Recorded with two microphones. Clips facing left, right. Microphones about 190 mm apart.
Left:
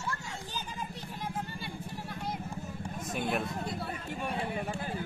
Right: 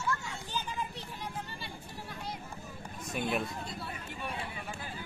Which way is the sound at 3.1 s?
Centre (ahead or behind).